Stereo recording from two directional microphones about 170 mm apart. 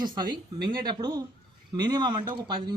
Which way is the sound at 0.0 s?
25° right (ahead or behind).